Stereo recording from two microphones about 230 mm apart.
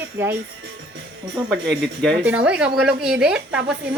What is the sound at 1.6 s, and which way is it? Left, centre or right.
Speech, right.